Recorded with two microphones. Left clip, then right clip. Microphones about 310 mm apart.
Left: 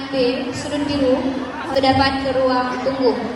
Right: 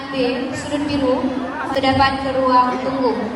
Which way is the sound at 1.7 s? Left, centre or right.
Right.